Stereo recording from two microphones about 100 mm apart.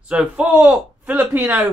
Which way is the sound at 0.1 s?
15° right (ahead or behind).